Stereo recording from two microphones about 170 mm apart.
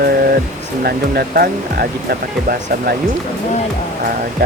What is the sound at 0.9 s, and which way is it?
Speech, 65° right (ahead or behind).